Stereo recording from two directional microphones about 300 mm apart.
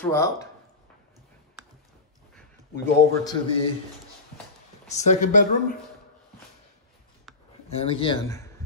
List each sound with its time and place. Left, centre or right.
0.0 s speech: centre
2.3 s a man's voice: centre
4.9 s speech: left
7.7 s speech: centre